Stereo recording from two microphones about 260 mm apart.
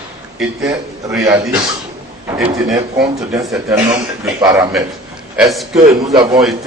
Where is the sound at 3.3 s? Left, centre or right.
Centre.